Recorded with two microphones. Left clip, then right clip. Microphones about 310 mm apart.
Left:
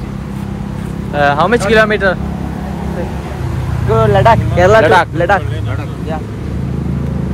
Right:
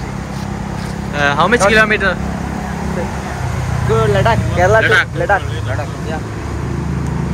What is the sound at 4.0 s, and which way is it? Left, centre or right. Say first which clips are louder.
Speech: left 6 dB; left.